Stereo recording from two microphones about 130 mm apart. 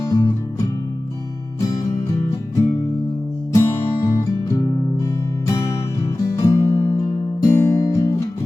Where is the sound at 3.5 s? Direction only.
20° left (ahead or behind).